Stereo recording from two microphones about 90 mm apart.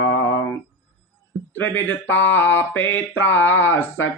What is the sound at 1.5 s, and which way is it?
Mantra, 25° left (ahead or behind).